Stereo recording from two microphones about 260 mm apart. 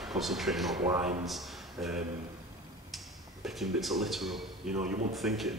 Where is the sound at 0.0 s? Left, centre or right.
Centre.